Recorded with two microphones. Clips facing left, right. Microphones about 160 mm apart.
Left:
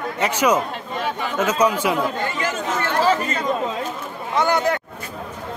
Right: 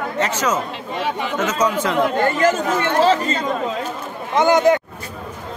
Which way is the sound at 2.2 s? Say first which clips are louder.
Right 8 dB; 50° right (ahead or behind).